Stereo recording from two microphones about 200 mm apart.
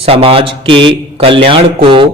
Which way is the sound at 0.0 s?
30° right (ahead or behind).